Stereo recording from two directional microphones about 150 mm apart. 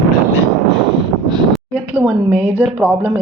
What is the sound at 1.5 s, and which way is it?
Speech, 10° right (ahead or behind).